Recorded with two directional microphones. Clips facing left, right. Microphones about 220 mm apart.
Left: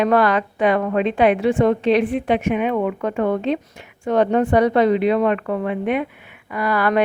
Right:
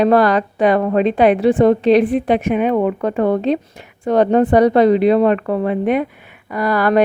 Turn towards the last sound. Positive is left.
turn(degrees=-40)  # may be behind; listen again after turning